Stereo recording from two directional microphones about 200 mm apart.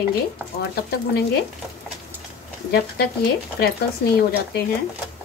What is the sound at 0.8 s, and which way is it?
Speech, 50° left (ahead or behind).